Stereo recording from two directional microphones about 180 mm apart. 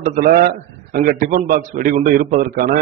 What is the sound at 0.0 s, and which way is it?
A man's voice, 50° right (ahead or behind).